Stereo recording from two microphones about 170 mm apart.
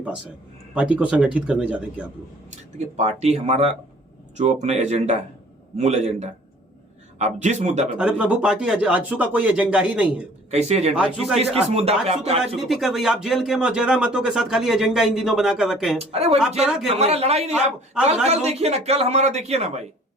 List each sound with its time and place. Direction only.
0.7 s speech: 5° right (ahead or behind)
2.7 s speech: 40° right (ahead or behind)
7.9 s speech: 5° right (ahead or behind)
10.5 s speech: 40° right (ahead or behind)
10.9 s speech: 5° right (ahead or behind)
11.5 s speech: 35° right (ahead or behind)
12.5 s speech: centre (ahead or behind)
16.0 s speech: 35° right (ahead or behind)
18.0 s speech: 5° right (ahead or behind)
18.3 s speech: 40° right (ahead or behind)